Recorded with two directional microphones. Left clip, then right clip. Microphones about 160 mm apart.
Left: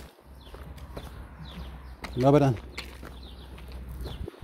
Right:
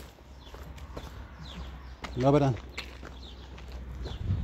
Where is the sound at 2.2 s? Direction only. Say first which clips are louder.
Left 3 dB; 35° left (ahead or behind).